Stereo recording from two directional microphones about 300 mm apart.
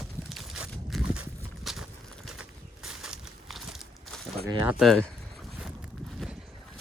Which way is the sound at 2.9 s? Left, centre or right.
Centre.